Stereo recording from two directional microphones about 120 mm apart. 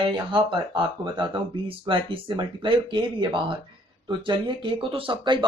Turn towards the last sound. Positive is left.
turn(degrees=-45)  # may be behind; listen again after turning